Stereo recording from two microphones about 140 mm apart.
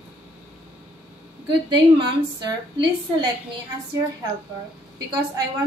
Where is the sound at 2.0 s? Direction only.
35° right (ahead or behind).